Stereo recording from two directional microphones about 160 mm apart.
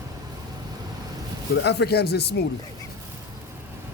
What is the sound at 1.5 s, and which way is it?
Speech, 90° left.